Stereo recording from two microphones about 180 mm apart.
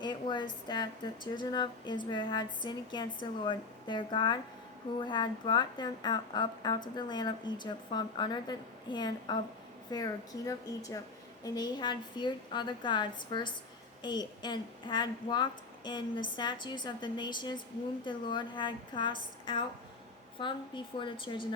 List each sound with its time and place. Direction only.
0.0 s a woman's voice: 25° left (ahead or behind)